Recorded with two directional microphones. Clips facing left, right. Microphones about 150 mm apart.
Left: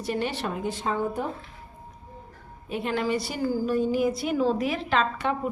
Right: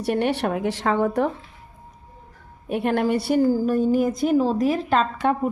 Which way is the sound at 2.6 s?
60° right (ahead or behind).